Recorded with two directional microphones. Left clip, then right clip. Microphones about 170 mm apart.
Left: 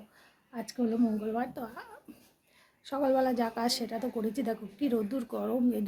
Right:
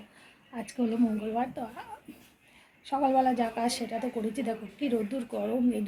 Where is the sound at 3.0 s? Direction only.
30° left (ahead or behind).